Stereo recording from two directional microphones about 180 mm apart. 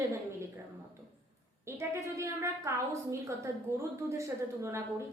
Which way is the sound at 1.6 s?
15° right (ahead or behind).